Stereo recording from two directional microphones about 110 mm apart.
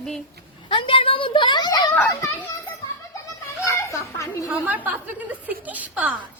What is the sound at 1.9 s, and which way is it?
Speech, 15° left (ahead or behind).